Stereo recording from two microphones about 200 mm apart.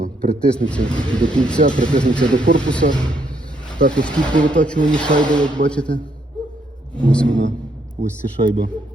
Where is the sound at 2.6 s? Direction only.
5° left (ahead or behind).